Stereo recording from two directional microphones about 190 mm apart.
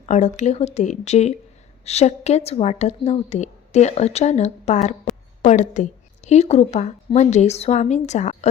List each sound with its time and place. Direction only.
0.0 s a woman's voice: 35° left (ahead or behind)